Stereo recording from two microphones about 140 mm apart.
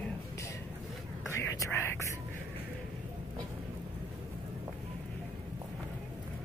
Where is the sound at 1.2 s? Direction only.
20° left (ahead or behind).